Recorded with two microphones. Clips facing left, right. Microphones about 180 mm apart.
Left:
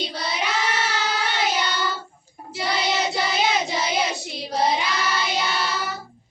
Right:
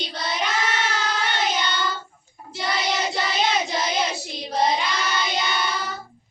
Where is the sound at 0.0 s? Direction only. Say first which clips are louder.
Even; 5° left (ahead or behind).